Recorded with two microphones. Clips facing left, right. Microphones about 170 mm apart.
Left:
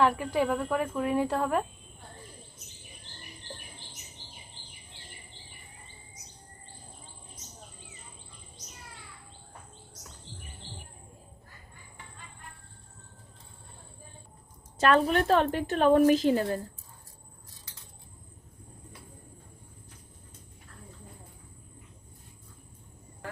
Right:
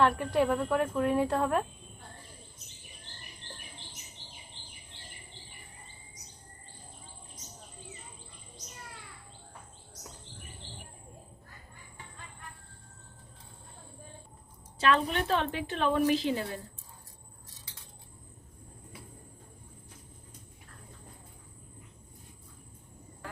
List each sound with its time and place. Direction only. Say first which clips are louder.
0.0 s speech: even; 5° left (ahead or behind)
14.8 s a woman's voice: left 4 dB; 45° left (ahead or behind)